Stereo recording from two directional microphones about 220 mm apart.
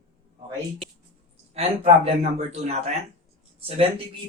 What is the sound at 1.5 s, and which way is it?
Speech, 30° right (ahead or behind).